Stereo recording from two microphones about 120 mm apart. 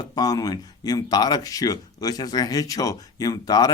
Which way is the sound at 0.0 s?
35° left (ahead or behind).